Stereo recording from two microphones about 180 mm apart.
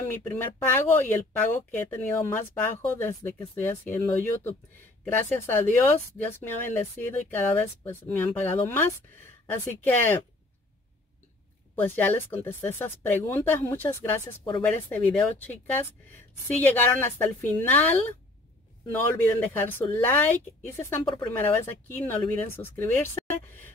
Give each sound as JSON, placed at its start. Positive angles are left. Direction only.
{"t": 0.7, "sound": "a woman's voice", "side_deg": 10}
{"t": 11.7, "sound": "a woman's voice", "side_deg": 10}
{"t": 21.0, "sound": "speech", "side_deg": 30}
{"t": 21.3, "sound": "a woman's voice", "side_deg": 10}